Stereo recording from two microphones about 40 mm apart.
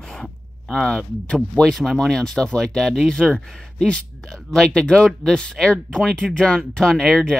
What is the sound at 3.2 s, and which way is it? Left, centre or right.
Speech, left.